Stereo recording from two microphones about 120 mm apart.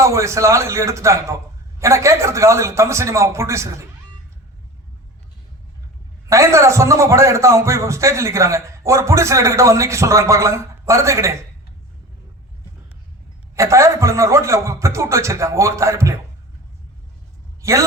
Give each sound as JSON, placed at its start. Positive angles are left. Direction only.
{"t": 0.0, "sound": "a man's voice", "side_deg": -25}
{"t": 6.2, "sound": "a man's voice", "side_deg": -25}
{"t": 13.6, "sound": "a man's voice", "side_deg": -25}
{"t": 17.6, "sound": "a man's voice", "side_deg": -25}